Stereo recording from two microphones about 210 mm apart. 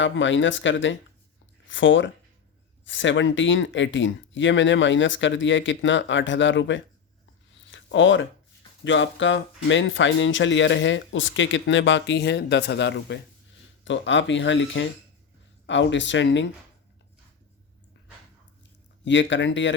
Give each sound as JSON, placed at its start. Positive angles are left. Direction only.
{"t": 0.0, "sound": "speech", "side_deg": 65}
{"t": 7.6, "sound": "a sound", "side_deg": 60}
{"t": 8.8, "sound": "speech", "side_deg": 65}
{"t": 19.0, "sound": "speech", "side_deg": 60}